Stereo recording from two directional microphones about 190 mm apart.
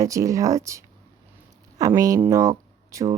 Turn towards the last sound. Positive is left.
turn(degrees=-15)  # may be behind; listen again after turning